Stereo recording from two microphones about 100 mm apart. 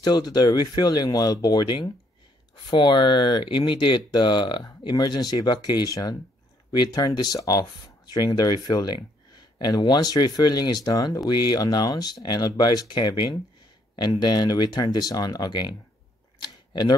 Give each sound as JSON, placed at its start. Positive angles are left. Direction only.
{"t": 0.0, "sound": "speech", "side_deg": 45}